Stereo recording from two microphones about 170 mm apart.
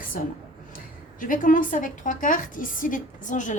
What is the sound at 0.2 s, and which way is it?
A woman's voice, 55° left (ahead or behind).